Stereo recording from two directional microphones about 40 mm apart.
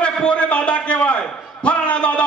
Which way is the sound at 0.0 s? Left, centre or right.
Left.